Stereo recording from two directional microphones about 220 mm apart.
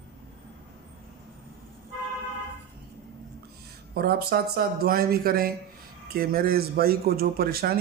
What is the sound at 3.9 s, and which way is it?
A man's voice, 45° right (ahead or behind).